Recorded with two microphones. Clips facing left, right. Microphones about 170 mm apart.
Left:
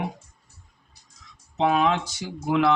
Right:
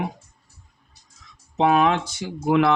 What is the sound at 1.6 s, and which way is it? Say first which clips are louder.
Speech: right 3 dB; 60° right (ahead or behind).